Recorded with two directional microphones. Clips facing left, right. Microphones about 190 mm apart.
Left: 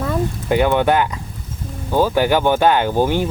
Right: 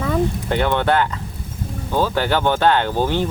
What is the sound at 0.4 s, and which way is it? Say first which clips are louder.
Speech: left 3 dB; 10° left (ahead or behind).